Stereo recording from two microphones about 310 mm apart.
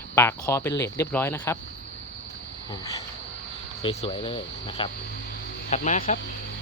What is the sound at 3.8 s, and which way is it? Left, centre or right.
Speech, centre.